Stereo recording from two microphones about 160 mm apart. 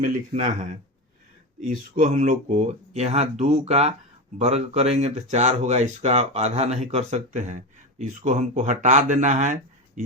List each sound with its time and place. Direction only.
0.3 s speech: 50° right (ahead or behind)